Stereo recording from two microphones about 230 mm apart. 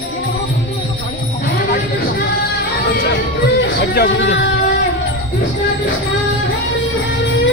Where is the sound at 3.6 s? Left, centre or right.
Left.